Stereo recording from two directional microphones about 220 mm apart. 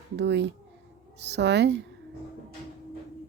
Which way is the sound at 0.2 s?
50° right (ahead or behind).